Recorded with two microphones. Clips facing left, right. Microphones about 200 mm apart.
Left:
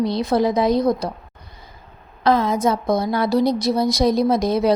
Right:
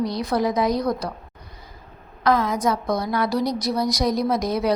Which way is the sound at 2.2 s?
25° left (ahead or behind).